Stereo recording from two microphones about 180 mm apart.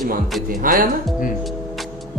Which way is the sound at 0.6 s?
50° right (ahead or behind).